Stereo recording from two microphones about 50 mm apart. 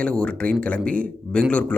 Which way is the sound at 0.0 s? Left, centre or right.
Centre.